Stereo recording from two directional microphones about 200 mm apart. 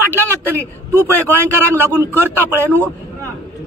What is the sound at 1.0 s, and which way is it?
Speech, 10° left (ahead or behind).